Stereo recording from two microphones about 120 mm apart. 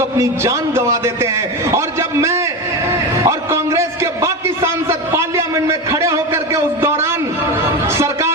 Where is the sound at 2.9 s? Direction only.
25° right (ahead or behind).